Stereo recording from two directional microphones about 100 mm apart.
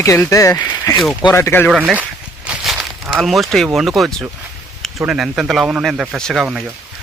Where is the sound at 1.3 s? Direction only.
25° left (ahead or behind).